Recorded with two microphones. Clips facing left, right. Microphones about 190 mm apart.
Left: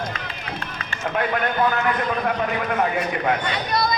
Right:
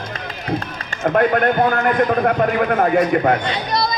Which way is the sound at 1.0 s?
50° right (ahead or behind).